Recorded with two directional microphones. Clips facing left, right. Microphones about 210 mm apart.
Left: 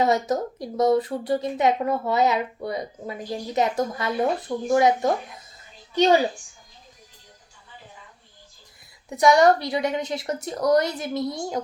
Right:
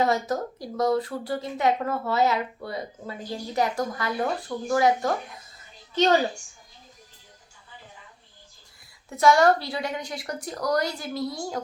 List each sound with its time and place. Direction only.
0.0 s a woman's voice: 20° left (ahead or behind)
9.0 s speech: 15° left (ahead or behind)